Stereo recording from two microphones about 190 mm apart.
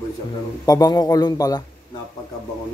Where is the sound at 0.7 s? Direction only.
20° left (ahead or behind).